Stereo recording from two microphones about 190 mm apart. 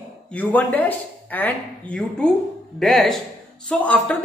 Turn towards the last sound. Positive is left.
turn(degrees=5)  # may be behind; listen again after turning